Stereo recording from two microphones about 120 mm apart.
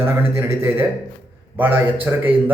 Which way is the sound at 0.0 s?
20° right (ahead or behind).